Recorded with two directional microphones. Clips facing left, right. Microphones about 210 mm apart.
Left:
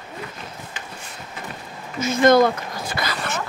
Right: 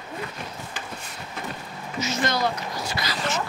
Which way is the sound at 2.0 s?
50° left (ahead or behind).